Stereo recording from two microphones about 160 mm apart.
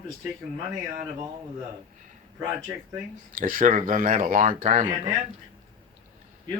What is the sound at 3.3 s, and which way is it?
Speech, 55° right (ahead or behind).